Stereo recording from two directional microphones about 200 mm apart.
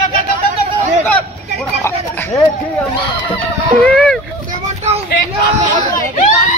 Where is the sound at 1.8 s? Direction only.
10° left (ahead or behind).